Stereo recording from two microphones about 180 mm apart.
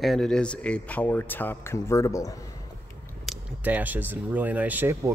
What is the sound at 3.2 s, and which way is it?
Speech, 5° right (ahead or behind).